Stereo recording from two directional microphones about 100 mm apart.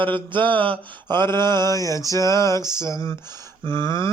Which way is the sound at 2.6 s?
45° right (ahead or behind).